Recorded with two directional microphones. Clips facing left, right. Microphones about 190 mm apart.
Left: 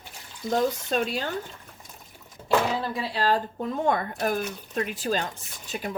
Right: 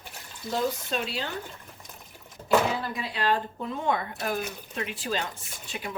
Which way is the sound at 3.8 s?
45° left (ahead or behind).